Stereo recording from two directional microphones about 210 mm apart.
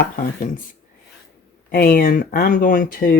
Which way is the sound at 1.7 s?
45° left (ahead or behind).